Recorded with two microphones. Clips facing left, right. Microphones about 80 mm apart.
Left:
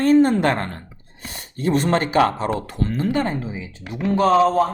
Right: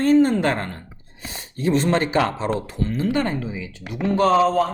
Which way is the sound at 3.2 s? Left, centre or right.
Left.